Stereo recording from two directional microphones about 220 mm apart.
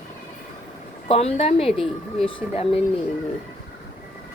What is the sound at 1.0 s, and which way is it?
Speech, 25° left (ahead or behind).